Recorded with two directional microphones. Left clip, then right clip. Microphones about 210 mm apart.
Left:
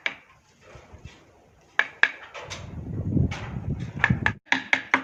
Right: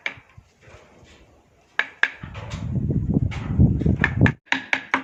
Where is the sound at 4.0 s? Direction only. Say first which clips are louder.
Even; centre (ahead or behind).